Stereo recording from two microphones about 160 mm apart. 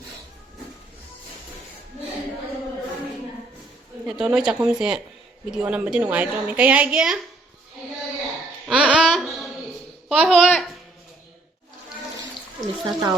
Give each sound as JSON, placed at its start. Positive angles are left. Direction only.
{"t": 4.0, "sound": "a woman's voice", "side_deg": -5}
{"t": 8.6, "sound": "a sound", "side_deg": -5}
{"t": 10.1, "sound": "speech", "side_deg": -5}
{"t": 12.8, "sound": "speech", "side_deg": -25}